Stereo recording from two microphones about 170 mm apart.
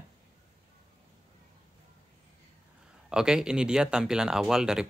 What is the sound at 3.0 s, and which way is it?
Speech, 5° right (ahead or behind).